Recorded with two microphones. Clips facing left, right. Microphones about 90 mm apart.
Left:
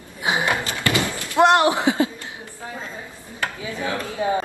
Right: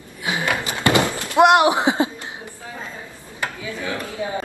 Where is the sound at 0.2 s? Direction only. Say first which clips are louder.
Left 1 dB; 20° left (ahead or behind).